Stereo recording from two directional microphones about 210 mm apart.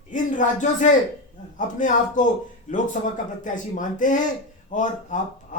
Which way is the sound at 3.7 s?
40° left (ahead or behind).